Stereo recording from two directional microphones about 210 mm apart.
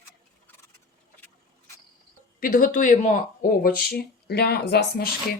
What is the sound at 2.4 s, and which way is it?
Speech, 40° left (ahead or behind).